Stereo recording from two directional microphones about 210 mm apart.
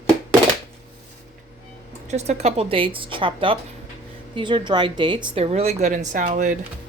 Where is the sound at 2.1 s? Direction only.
30° right (ahead or behind).